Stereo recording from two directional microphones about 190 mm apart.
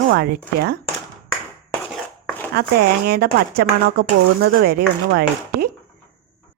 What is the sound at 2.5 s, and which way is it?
A woman's voice, 55° right (ahead or behind).